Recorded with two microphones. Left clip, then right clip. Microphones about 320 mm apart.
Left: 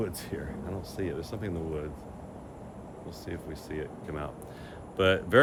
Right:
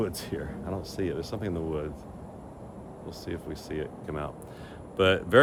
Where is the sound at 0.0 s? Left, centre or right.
Centre.